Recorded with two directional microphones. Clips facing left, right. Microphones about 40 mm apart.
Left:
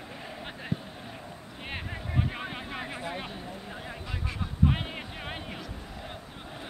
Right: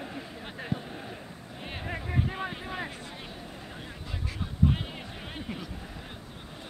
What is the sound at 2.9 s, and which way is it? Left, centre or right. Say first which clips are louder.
Vehicle: left 6 dB; left.